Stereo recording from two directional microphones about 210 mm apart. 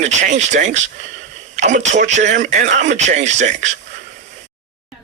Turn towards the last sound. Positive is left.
turn(degrees=-35)  # may be behind; listen again after turning